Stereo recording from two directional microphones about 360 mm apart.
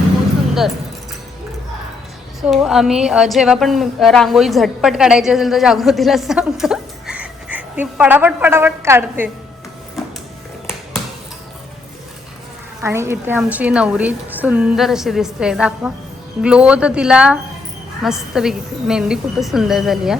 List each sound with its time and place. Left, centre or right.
2.5 s a woman's voice: centre
10.0 s music: centre
12.8 s a woman's voice: centre